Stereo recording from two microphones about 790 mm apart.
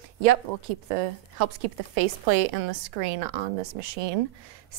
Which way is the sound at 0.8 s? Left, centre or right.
Right.